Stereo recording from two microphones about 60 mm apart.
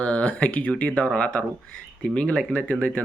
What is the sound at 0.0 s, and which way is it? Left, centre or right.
Speech, left.